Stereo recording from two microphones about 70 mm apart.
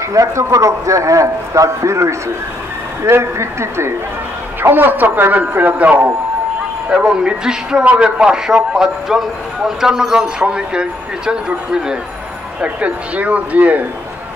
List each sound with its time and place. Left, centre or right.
0.1 s a man's voice: right
4.6 s a man's voice: right